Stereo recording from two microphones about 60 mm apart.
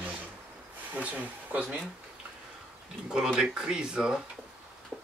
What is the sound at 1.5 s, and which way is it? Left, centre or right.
Speech, right.